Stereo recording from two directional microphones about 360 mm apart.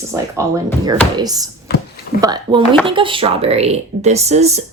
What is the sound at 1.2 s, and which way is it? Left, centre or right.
A woman's voice, centre.